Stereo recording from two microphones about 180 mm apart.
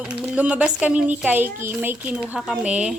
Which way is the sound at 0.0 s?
5° right (ahead or behind).